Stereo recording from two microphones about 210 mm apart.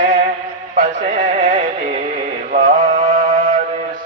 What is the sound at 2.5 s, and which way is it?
Mantra, 40° right (ahead or behind).